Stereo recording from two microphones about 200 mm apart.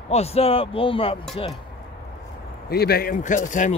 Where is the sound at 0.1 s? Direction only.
30° left (ahead or behind).